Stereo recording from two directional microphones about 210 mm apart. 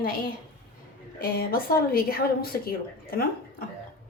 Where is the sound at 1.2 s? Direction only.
45° left (ahead or behind).